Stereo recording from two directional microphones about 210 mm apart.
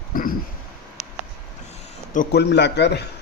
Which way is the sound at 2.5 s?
55° left (ahead or behind).